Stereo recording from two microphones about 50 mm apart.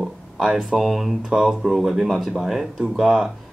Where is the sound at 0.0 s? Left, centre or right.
Centre.